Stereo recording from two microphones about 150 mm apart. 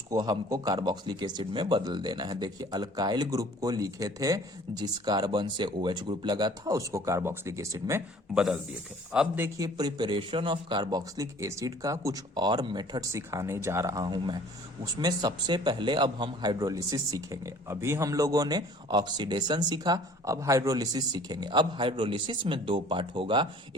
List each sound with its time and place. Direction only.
0.1 s a man's voice: 25° right (ahead or behind)
9.1 s speech: 10° right (ahead or behind)
9.6 s a man's voice: 25° right (ahead or behind)